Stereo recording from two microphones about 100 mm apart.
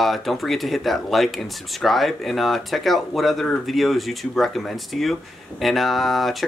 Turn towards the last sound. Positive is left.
turn(degrees=0)  # may be behind; listen again after turning